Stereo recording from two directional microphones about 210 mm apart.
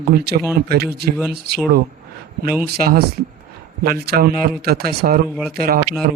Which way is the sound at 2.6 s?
45° right (ahead or behind).